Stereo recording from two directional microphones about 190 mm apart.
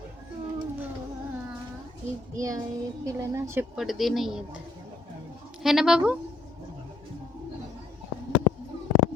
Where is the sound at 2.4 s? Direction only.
15° right (ahead or behind).